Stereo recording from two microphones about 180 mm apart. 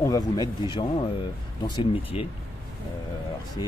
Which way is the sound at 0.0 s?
20° left (ahead or behind).